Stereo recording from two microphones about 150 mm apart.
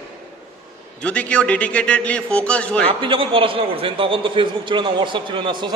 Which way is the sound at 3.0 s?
35° right (ahead or behind).